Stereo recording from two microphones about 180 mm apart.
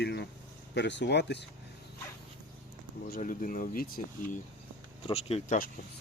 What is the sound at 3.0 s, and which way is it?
Speech, 55° left (ahead or behind).